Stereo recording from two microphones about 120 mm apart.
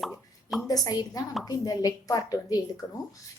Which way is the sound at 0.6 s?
30° left (ahead or behind).